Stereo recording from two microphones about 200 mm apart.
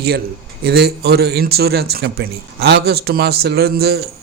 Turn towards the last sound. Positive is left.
turn(degrees=-50)  # may be behind; listen again after turning